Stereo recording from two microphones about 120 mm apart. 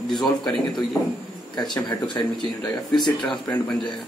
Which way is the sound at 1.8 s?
35° left (ahead or behind).